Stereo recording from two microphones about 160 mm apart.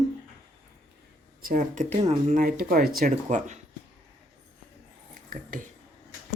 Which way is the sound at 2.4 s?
65° right (ahead or behind).